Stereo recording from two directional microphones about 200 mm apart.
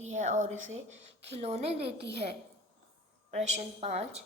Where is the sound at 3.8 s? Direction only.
30° right (ahead or behind).